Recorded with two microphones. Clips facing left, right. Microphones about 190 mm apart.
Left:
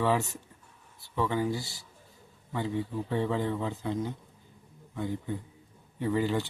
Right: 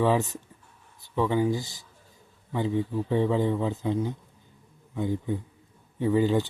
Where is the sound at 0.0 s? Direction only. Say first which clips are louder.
Right 4 dB; 15° right (ahead or behind).